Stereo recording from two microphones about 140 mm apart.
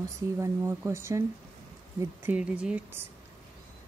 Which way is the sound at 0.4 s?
20° right (ahead or behind).